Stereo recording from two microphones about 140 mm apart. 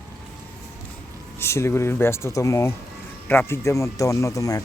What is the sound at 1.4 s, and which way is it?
Speech, 20° left (ahead or behind).